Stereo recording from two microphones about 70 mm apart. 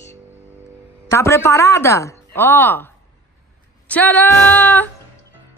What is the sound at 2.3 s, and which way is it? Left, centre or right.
Speech, left.